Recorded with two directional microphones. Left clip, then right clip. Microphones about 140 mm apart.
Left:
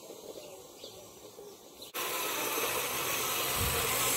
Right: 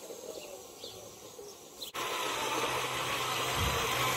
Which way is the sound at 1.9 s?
90° left.